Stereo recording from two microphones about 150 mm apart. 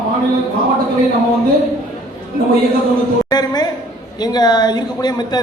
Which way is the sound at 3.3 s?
25° left (ahead or behind).